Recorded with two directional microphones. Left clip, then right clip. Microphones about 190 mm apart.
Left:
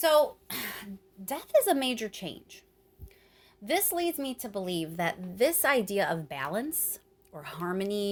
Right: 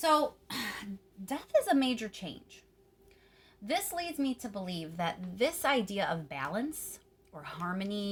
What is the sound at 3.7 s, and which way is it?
A woman's voice, 45° left (ahead or behind).